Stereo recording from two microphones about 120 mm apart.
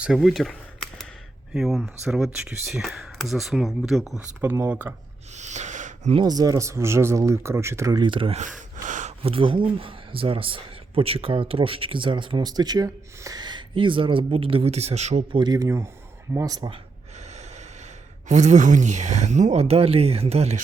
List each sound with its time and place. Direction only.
0.0 s speech: centre (ahead or behind)
1.5 s speech: 5° right (ahead or behind)
4.4 s speech: 20° right (ahead or behind)
5.4 s a sound: 80° right
6.2 s speech: 30° right (ahead or behind)
8.0 s speech: 45° right (ahead or behind)
8.4 s gasp: 90° right
9.2 s speech: 50° right (ahead or behind); by 15.2 s 65° right (ahead or behind)
15.3 s speech: 40° right (ahead or behind)
15.5 s speech: 25° right (ahead or behind)
18.3 s speech: 85° right; by 20.6 s 60° right (ahead or behind)